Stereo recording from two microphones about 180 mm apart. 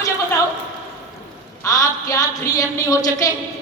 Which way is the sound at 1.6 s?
20° left (ahead or behind).